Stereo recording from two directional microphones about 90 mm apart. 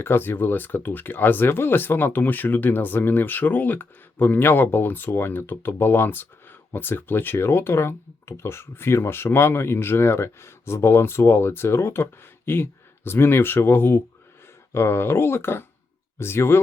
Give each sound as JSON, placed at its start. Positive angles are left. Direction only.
{"t": 0.0, "sound": "speech", "side_deg": 25}